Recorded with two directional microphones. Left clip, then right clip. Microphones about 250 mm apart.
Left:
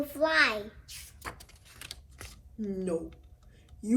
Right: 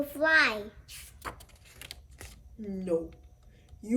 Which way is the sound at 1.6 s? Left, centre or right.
Centre.